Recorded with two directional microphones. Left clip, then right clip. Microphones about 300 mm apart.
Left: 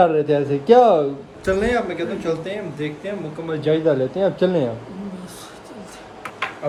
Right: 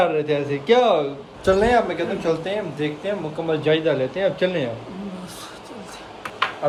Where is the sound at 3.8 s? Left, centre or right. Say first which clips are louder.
Left 2 dB; centre.